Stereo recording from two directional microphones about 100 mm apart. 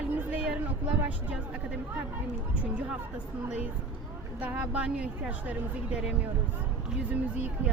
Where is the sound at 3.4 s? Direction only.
15° right (ahead or behind).